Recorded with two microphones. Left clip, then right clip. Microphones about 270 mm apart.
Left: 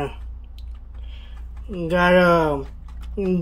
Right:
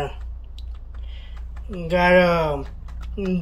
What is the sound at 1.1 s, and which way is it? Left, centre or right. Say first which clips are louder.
Speech: right 1 dB; centre.